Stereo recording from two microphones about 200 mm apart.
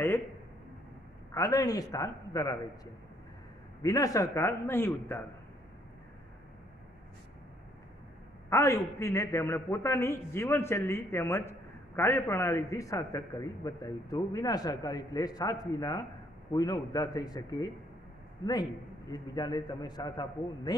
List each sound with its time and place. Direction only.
1.3 s a man's voice: 15° left (ahead or behind)
8.5 s a man's voice: 15° left (ahead or behind)